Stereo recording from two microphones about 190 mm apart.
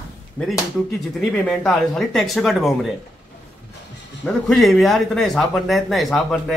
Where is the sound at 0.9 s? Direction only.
5° left (ahead or behind).